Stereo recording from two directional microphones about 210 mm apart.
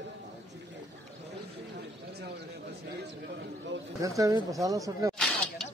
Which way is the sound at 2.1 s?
50° right (ahead or behind).